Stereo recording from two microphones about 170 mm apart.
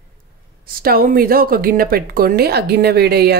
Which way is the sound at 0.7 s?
60° right (ahead or behind).